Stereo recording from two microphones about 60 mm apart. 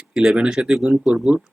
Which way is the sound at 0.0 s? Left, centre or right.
Centre.